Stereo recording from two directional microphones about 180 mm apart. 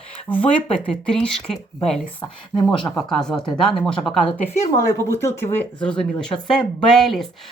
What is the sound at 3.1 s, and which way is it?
Speech, 5° left (ahead or behind).